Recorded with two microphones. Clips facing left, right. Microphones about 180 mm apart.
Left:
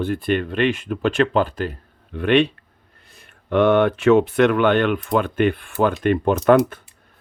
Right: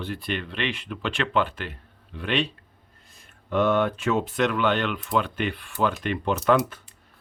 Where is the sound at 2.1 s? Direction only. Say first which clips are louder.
Left 10 dB; 55° left (ahead or behind).